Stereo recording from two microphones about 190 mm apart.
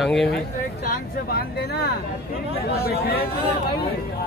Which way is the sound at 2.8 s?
55° left (ahead or behind).